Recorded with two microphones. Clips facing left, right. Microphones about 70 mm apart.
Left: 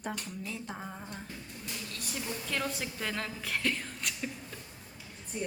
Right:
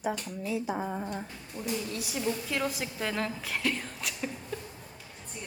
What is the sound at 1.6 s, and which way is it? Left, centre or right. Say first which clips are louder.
Speech: right 14 dB; right.